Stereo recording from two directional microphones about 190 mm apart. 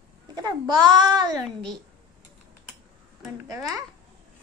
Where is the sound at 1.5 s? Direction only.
5° left (ahead or behind).